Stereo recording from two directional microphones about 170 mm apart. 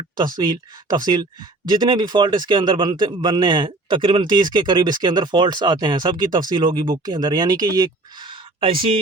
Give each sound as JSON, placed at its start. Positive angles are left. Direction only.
{"t": 0.3, "sound": "speech", "side_deg": -25}